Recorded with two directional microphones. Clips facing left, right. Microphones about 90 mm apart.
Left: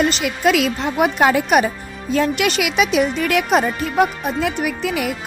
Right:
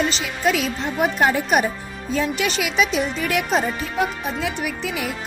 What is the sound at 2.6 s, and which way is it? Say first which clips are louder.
Speech: left 3 dB; 65° left (ahead or behind).